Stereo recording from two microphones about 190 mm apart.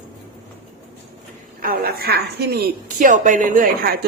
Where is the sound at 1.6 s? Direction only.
50° right (ahead or behind).